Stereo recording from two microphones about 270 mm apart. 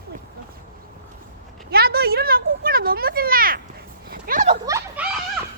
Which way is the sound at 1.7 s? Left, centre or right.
Right.